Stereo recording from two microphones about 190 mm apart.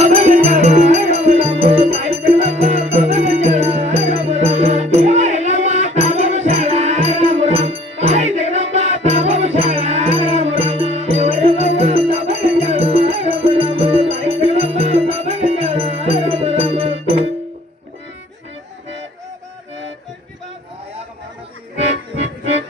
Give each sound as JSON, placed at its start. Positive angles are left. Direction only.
{"t": 0.0, "sound": "music", "side_deg": -35}